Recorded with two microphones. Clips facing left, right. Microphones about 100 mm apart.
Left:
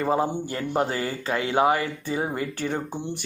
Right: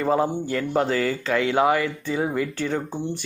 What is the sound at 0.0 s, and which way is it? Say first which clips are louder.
Speech: right 2 dB; 25° left (ahead or behind).